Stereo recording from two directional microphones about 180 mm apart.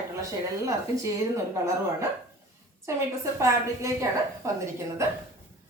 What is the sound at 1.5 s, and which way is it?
Speech, 15° right (ahead or behind).